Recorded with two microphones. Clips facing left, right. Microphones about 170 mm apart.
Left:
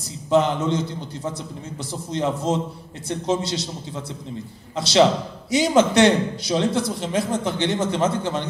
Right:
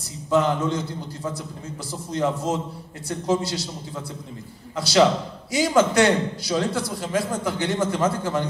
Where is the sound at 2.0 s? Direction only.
20° left (ahead or behind).